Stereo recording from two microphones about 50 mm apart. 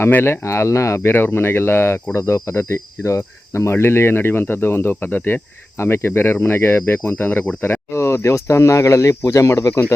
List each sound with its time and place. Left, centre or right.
0.3 s speech: left
1.1 s speech: left
2.1 s speech: left
4.9 s speech: left
5.7 s speech: left
7.2 s speech: left
7.9 s speech: left